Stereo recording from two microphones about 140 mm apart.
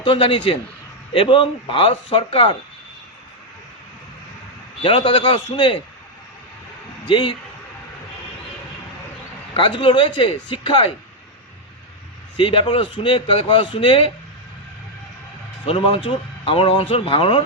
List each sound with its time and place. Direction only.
0.0 s speech: 40° left (ahead or behind)
4.8 s speech: 40° left (ahead or behind)
7.1 s speech: 35° left (ahead or behind)
9.6 s speech: 35° left (ahead or behind)
12.4 s speech: 40° left (ahead or behind)
15.6 s speech: 40° left (ahead or behind)